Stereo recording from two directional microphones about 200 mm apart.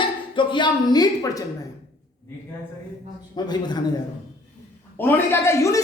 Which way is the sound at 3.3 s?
20° left (ahead or behind).